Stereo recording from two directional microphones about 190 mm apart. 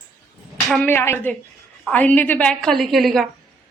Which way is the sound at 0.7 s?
10° left (ahead or behind).